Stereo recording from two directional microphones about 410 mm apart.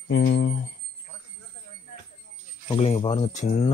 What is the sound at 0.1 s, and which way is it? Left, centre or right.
Speech, left.